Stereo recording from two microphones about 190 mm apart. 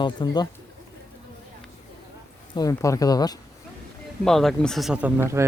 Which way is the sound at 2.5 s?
20° left (ahead or behind).